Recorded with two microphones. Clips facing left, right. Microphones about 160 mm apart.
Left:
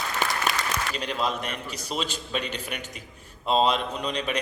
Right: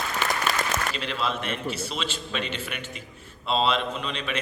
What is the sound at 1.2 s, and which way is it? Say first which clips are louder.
Speech: even; 40° left (ahead or behind).